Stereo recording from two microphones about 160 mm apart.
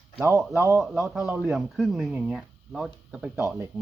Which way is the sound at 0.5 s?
20° right (ahead or behind).